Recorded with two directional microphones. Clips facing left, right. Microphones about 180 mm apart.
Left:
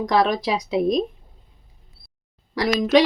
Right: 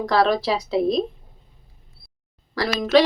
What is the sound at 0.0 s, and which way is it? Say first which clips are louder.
Speech: even; 15° left (ahead or behind).